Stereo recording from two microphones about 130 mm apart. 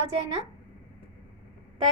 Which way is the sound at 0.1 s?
55° right (ahead or behind).